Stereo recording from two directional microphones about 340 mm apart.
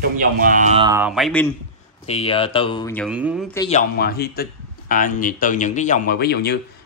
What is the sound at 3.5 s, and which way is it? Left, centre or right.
Speech, centre.